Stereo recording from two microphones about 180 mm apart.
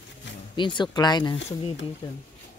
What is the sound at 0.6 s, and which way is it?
Speech, 25° left (ahead or behind).